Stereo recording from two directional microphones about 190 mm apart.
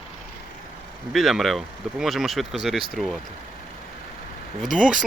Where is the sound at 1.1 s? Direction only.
Centre (ahead or behind).